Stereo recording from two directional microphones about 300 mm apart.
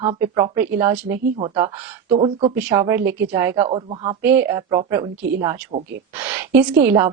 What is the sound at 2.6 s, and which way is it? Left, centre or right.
A woman's voice, centre.